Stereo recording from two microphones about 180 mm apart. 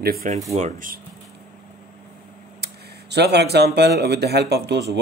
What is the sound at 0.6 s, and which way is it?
Speech, 45° right (ahead or behind).